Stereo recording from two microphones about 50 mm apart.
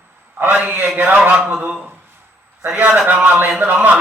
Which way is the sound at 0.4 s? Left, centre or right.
Right.